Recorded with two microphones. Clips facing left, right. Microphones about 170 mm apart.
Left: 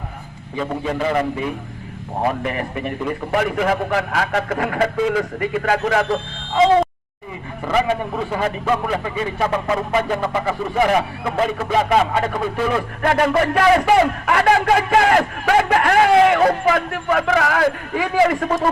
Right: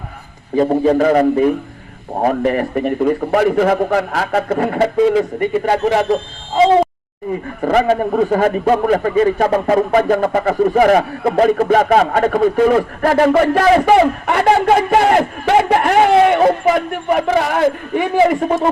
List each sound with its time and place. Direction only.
0.5 s a man's voice: 40° right (ahead or behind)
7.6 s a man's voice: 45° right (ahead or behind)
13.0 s a man's voice: 35° right (ahead or behind)